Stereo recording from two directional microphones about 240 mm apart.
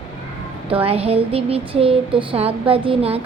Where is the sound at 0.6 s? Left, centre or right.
Right.